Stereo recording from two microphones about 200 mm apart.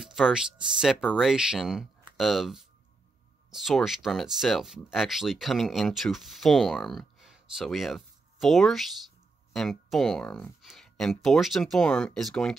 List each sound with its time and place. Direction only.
0.0 s speech: centre (ahead or behind)